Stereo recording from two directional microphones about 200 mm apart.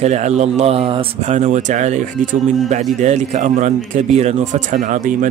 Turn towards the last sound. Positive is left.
turn(degrees=-40)  # may be behind; listen again after turning